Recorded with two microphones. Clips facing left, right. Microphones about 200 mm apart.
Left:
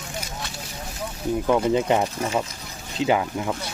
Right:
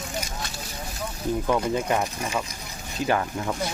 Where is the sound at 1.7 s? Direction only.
20° left (ahead or behind).